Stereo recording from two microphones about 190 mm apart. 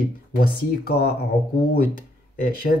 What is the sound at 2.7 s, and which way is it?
Speech, 50° left (ahead or behind).